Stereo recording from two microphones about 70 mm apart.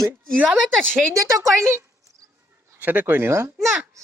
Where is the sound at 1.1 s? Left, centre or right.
Right.